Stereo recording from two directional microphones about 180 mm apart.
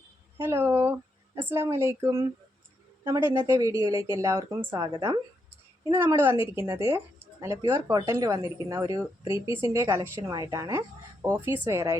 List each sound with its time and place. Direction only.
0.3 s a woman's voice: 15° right (ahead or behind)